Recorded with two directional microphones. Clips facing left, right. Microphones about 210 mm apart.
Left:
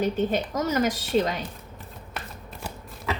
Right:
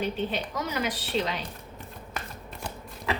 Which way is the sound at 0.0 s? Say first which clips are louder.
Left 5 dB; 45° left (ahead or behind).